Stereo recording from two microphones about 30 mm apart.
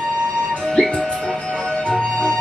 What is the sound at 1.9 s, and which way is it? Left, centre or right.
Music, left.